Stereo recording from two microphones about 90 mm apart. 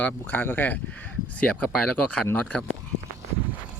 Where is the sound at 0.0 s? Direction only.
20° left (ahead or behind).